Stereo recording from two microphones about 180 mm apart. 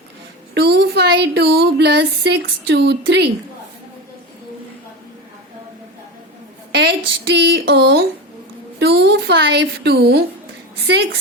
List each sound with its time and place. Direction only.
0.5 s speech: 70° right (ahead or behind)
6.7 s a woman's voice: 70° right (ahead or behind)